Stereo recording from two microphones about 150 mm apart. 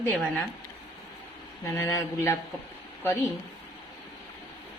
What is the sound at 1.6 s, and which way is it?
Speech, 20° left (ahead or behind).